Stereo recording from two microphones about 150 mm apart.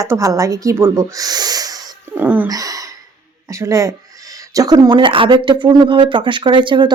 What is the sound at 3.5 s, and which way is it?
Speech, 20° right (ahead or behind).